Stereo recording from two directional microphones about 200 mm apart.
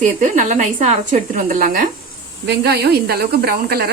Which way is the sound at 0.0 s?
40° right (ahead or behind).